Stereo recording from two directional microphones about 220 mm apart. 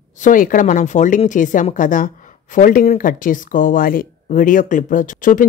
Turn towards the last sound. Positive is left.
turn(degrees=35)  # may be behind; listen again after turning